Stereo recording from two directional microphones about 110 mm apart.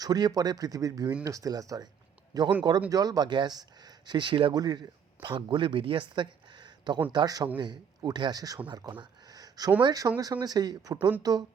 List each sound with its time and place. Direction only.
0.0 s speech: 35° right (ahead or behind)